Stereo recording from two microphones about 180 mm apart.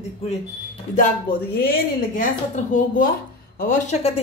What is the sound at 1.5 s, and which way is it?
A woman's voice, 55° left (ahead or behind).